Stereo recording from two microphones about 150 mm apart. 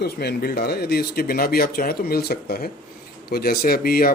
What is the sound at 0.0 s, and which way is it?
Speech, 90° left.